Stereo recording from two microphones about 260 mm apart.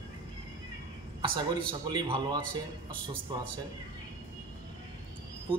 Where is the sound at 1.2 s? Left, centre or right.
Centre.